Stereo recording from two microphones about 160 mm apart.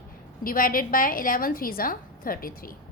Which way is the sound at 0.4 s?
60° left (ahead or behind).